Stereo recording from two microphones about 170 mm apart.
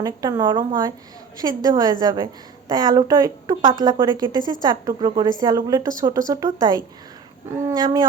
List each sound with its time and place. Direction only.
0.0 s a woman's voice: 20° right (ahead or behind)